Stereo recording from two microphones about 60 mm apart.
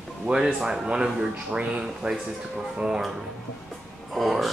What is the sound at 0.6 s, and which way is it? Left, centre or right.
Speech, centre.